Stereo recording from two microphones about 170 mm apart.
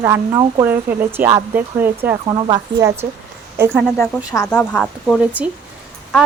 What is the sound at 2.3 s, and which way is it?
Speech, 25° right (ahead or behind).